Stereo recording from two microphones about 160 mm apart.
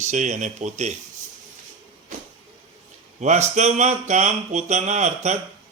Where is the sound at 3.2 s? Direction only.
45° right (ahead or behind).